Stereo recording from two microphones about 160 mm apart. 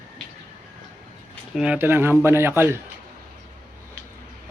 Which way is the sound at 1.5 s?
5° right (ahead or behind).